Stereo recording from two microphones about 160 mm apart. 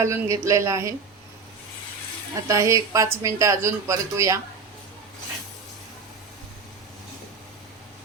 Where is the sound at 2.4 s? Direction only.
20° right (ahead or behind).